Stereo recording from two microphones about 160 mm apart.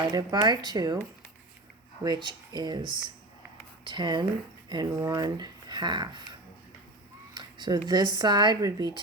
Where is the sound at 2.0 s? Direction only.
25° right (ahead or behind).